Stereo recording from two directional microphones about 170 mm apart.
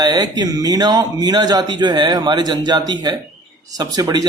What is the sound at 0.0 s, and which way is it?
Speech, 25° right (ahead or behind).